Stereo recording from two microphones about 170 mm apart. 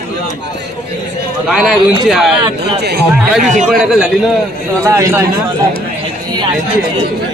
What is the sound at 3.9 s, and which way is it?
Speech, 5° right (ahead or behind).